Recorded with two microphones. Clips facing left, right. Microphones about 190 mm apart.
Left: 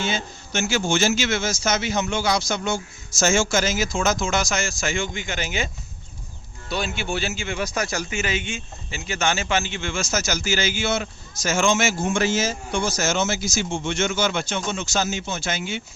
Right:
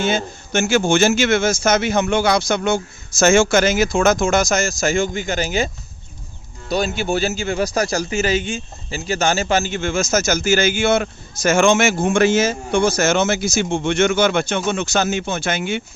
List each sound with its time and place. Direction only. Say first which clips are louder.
0.0 s a man's voice: right 7 dB; 50° right (ahead or behind)